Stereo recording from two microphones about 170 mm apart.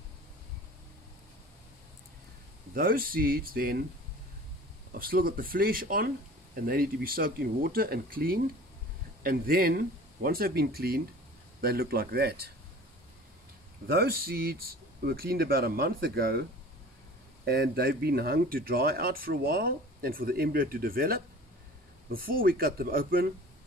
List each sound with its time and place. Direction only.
2.7 s speech: 60° right (ahead or behind)
4.9 s speech: 60° right (ahead or behind)
13.8 s speech: 65° right (ahead or behind)
17.5 s speech: 65° right (ahead or behind)